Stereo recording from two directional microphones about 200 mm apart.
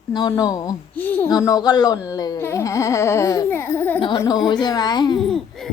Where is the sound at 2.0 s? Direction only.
20° left (ahead or behind).